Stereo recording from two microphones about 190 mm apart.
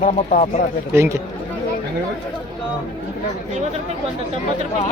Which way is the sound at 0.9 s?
15° right (ahead or behind).